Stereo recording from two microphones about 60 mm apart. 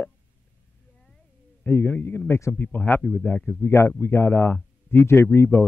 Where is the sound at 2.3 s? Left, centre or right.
Left.